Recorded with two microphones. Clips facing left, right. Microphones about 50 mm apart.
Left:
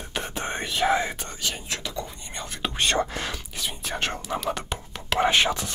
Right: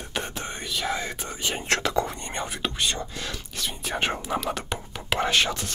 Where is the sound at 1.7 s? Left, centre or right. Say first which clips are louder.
Right 8 dB; right.